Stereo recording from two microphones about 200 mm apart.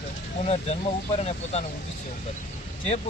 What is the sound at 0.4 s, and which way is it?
A man's voice, 30° left (ahead or behind).